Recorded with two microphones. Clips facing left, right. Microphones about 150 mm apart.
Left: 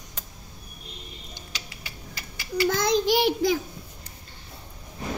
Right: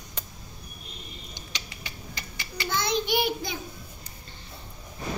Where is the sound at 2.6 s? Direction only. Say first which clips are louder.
Left 5 dB; 90° left.